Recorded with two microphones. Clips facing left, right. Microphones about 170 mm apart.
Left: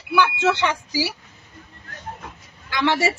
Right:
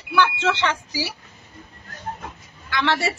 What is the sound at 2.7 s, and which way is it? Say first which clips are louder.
Speech: left 2 dB; 10° left (ahead or behind).